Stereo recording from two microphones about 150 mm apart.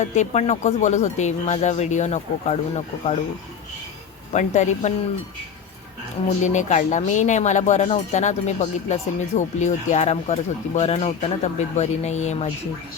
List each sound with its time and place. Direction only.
0.0 s speech: 50° left (ahead or behind)
4.3 s speech: 50° left (ahead or behind)
6.4 s speech: 55° left (ahead or behind)